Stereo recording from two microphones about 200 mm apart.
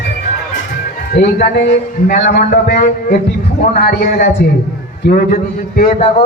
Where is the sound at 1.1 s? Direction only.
55° left (ahead or behind).